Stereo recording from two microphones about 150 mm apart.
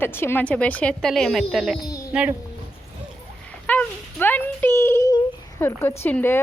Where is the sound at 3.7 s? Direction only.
10° left (ahead or behind).